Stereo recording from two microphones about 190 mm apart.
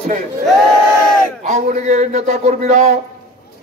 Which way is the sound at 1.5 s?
35° right (ahead or behind).